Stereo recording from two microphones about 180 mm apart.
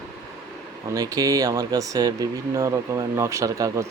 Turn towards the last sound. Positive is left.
turn(degrees=-15)  # may be behind; listen again after turning